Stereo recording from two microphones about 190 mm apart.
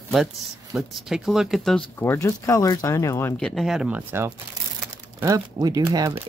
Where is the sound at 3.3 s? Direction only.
Centre (ahead or behind).